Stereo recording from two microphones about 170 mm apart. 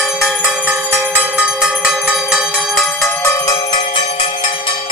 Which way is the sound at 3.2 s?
20° left (ahead or behind).